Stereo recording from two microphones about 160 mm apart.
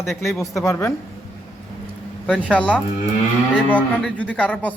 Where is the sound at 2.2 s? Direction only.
5° left (ahead or behind).